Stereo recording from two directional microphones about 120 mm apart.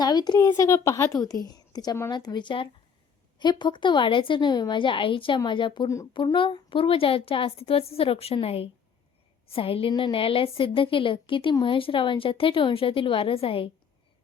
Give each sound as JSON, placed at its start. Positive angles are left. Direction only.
{"t": 0.0, "sound": "a woman's voice", "side_deg": 35}